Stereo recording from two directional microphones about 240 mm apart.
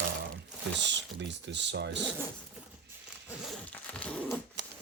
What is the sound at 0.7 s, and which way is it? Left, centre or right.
Speech, right.